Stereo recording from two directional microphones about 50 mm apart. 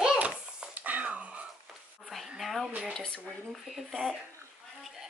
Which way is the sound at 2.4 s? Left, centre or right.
Centre.